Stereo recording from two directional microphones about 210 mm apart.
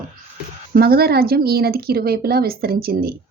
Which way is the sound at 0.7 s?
45° right (ahead or behind).